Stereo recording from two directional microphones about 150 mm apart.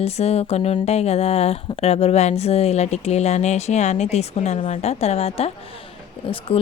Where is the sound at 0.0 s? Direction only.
45° left (ahead or behind).